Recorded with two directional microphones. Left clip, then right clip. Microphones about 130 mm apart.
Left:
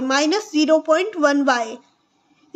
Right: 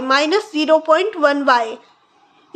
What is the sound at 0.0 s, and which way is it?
A child's voice, 25° left (ahead or behind).